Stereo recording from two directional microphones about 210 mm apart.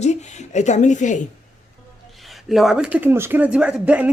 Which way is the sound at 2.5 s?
Centre (ahead or behind).